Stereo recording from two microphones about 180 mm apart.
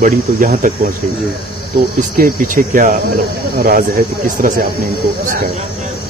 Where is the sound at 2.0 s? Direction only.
50° right (ahead or behind).